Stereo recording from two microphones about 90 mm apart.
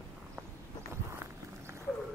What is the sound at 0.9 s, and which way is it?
Walk, 30° right (ahead or behind).